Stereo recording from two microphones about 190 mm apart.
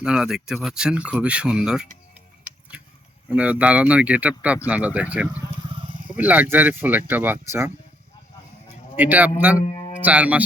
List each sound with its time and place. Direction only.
0.0 s speech: 5° right (ahead or behind)
2.7 s a sound: 5° right (ahead or behind)
3.3 s speech: 5° right (ahead or behind)
5.9 s roaring cats: 25° right (ahead or behind)
6.1 s speech: 10° right (ahead or behind)
9.0 s speech: 10° right (ahead or behind)